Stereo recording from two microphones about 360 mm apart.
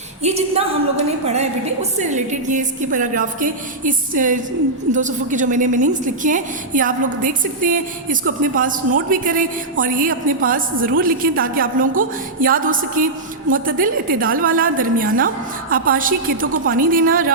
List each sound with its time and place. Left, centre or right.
0.2 s a woman's voice: centre